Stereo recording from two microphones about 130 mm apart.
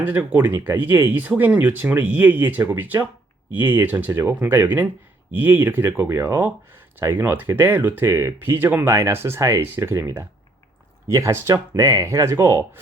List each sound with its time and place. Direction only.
0.0 s speech: 15° right (ahead or behind)